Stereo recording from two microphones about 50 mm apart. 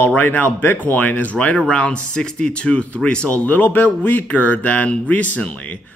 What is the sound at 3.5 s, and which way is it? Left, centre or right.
Speech, left.